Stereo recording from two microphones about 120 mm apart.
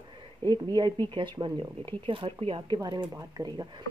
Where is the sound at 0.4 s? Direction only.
35° right (ahead or behind).